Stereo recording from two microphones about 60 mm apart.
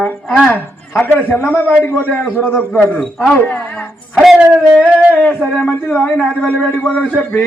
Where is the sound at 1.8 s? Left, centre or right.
Left.